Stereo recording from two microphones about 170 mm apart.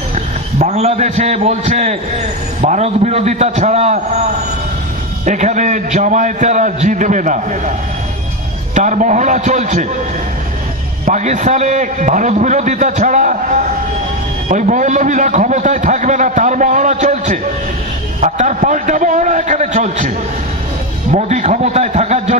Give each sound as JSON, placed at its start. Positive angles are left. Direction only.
{"t": 0.1, "sound": "a man's voice", "side_deg": -40}
{"t": 5.2, "sound": "a man's voice", "side_deg": -45}
{"t": 8.7, "sound": "a man's voice", "side_deg": -45}
{"t": 11.1, "sound": "a man's voice", "side_deg": -45}
{"t": 21.3, "sound": "a man's voice", "side_deg": -45}